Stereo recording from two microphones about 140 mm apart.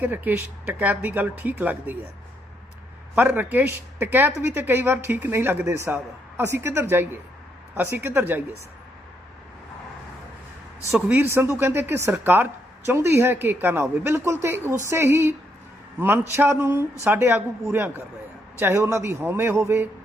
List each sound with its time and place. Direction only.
0.0 s speech: 15° right (ahead or behind)
3.2 s speech: 10° right (ahead or behind)
10.9 s speech: 10° right (ahead or behind)